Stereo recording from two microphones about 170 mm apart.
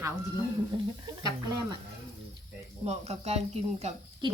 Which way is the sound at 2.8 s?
40° right (ahead or behind).